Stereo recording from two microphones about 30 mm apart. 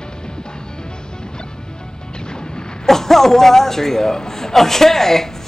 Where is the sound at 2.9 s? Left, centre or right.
Centre.